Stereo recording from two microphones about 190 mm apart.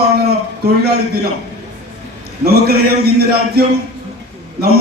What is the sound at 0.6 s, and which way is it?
Speech, 55° right (ahead or behind).